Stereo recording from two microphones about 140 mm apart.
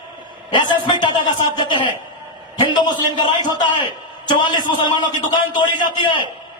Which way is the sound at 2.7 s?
30° left (ahead or behind).